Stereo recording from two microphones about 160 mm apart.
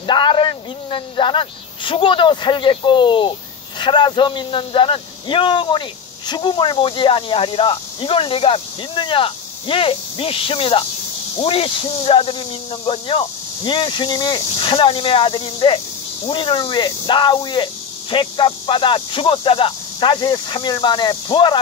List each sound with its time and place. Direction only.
0.0 s speech: 30° left (ahead or behind)